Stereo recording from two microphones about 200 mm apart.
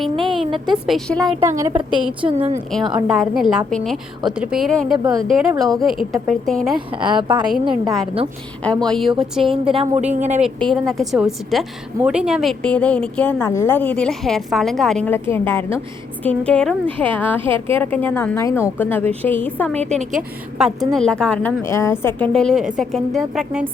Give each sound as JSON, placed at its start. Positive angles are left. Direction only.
{"t": 0.0, "sound": "a sound", "side_deg": 0}
{"t": 0.7, "sound": "a woman's voice", "side_deg": 0}
{"t": 1.4, "sound": "a woman's voice", "side_deg": -15}
{"t": 2.2, "sound": "speech", "side_deg": -30}
{"t": 2.9, "sound": "a woman's voice", "side_deg": 0}
{"t": 7.1, "sound": "a woman's voice", "side_deg": -25}
{"t": 7.7, "sound": "a woman's voice", "side_deg": 0}
{"t": 9.6, "sound": "speech", "side_deg": -30}
{"t": 10.4, "sound": "a woman's voice", "side_deg": 0}
{"t": 19.8, "sound": "speech", "side_deg": -35}
{"t": 20.1, "sound": "a woman's voice", "side_deg": 0}